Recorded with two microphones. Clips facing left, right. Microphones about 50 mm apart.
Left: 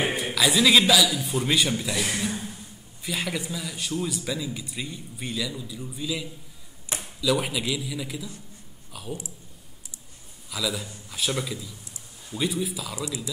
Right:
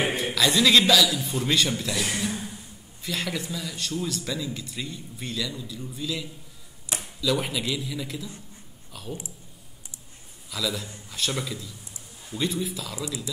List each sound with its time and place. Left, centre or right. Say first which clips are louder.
0.1 s a man's voice: even; centre
10.5 s a man's voice: even; centre